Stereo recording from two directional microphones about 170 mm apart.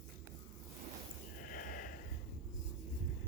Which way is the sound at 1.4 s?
55° left (ahead or behind).